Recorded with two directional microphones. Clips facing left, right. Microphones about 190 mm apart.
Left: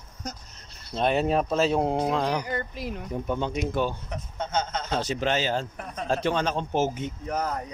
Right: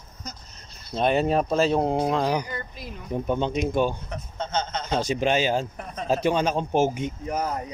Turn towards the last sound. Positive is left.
turn(degrees=-10)  # may be behind; listen again after turning